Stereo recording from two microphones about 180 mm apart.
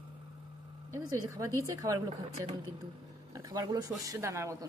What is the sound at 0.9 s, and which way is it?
Speech, 20° right (ahead or behind).